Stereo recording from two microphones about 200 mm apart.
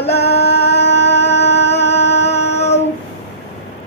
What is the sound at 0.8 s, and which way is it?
Music, 60° left (ahead or behind).